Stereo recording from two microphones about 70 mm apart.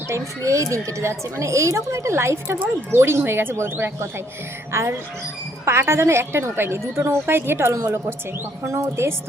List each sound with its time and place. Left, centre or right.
0.1 s speech: right